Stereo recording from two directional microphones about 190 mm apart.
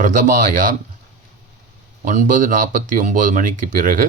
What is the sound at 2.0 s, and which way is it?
A man's voice, 45° right (ahead or behind).